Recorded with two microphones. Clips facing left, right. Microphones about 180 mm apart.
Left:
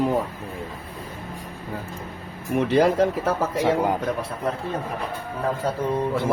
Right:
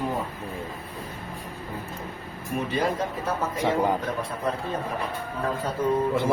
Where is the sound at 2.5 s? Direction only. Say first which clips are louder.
Left 8 dB; 85° left.